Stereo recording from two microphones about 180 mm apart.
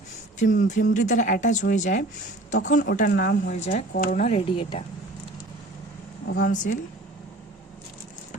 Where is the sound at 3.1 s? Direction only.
60° left (ahead or behind).